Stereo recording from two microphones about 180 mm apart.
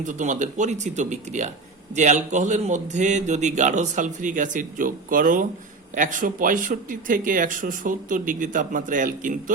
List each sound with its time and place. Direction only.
0.0 s a man's voice: 45° right (ahead or behind)